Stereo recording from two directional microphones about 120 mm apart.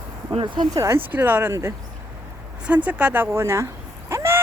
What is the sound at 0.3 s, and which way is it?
Speech, 40° right (ahead or behind).